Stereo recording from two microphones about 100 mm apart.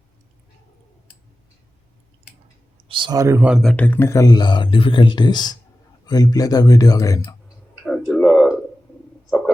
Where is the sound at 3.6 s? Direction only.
10° left (ahead or behind); by 7.4 s 35° left (ahead or behind).